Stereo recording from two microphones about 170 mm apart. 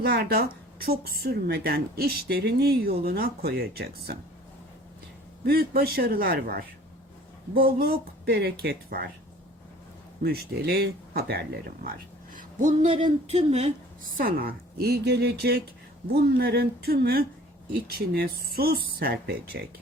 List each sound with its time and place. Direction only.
0.0 s a woman's voice: 65° right (ahead or behind)
5.5 s a woman's voice: 65° right (ahead or behind)
10.2 s speech: 65° right (ahead or behind)
11.8 s a woman's voice: 50° right (ahead or behind); by 19.6 s 70° right (ahead or behind)